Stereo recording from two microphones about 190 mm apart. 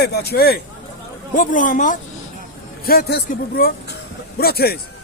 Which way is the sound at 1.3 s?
45° left (ahead or behind).